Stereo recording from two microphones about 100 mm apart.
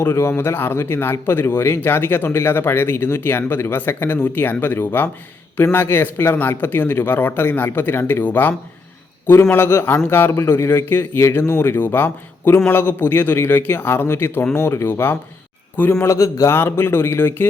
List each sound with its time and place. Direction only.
0.0 s a man's voice: 25° left (ahead or behind)